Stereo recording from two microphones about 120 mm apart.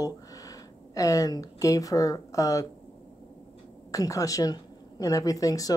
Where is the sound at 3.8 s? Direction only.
30° left (ahead or behind).